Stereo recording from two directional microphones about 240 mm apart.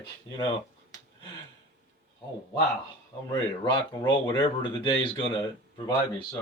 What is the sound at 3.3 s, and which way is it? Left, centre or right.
Speech, centre.